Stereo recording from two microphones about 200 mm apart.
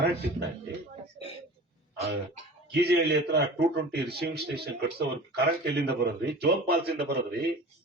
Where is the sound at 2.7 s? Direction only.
55° right (ahead or behind).